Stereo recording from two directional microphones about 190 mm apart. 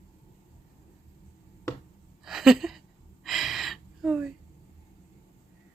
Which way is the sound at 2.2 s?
Centre (ahead or behind).